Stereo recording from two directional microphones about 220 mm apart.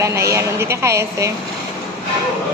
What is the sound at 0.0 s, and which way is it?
A woman's voice, 15° right (ahead or behind).